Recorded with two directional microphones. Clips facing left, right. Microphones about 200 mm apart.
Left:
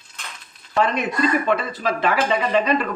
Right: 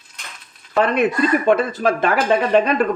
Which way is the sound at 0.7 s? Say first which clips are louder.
Right 4 dB; 60° right (ahead or behind).